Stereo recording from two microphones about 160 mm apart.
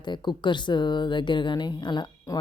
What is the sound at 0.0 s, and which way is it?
Speech, 30° left (ahead or behind).